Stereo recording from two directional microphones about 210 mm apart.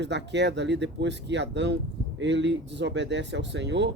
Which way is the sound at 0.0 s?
55° right (ahead or behind).